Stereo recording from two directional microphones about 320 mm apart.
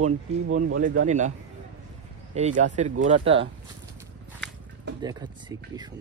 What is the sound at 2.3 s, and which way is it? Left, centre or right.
Speech, right.